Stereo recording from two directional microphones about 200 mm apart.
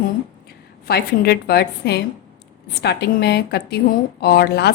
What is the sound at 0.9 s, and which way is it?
A woman's voice, 50° left (ahead or behind).